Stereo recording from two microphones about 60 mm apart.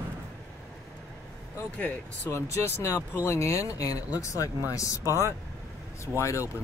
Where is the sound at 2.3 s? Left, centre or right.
Left.